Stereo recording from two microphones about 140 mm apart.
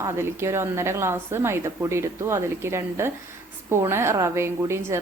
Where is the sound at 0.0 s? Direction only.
20° right (ahead or behind).